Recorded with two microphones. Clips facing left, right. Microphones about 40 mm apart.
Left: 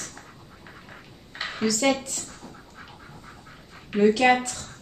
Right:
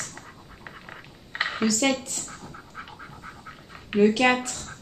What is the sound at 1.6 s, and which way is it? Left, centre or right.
Speech, centre.